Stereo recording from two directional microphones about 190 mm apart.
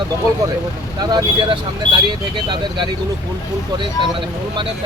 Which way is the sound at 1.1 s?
25° right (ahead or behind).